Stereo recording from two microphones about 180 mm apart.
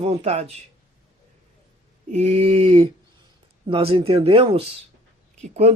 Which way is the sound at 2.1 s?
35° right (ahead or behind).